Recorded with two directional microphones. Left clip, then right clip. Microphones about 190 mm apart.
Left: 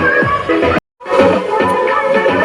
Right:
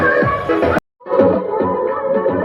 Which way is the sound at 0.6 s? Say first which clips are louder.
Left 2 dB; 40° left (ahead or behind).